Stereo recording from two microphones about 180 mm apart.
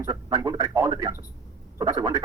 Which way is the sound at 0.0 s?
15° right (ahead or behind).